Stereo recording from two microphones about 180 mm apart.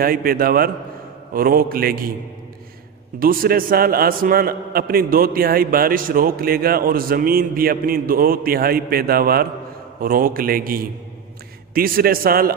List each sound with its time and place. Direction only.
0.0 s a man's voice: 55° right (ahead or behind)
3.2 s a man's voice: 50° right (ahead or behind)